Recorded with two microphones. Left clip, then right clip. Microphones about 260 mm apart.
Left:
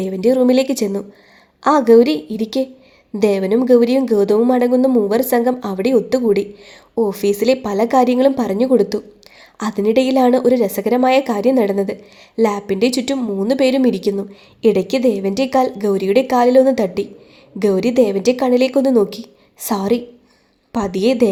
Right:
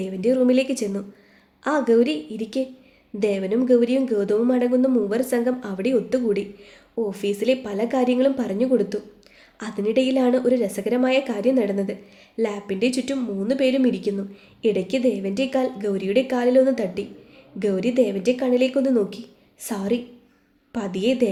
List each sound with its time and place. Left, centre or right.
0.0 s a woman's voice: left